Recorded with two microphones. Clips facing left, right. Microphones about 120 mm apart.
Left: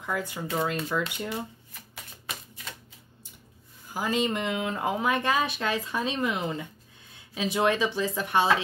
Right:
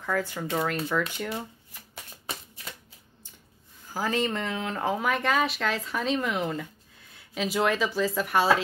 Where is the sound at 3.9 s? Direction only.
15° left (ahead or behind).